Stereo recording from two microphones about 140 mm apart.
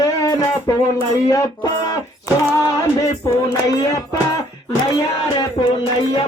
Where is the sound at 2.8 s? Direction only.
25° left (ahead or behind).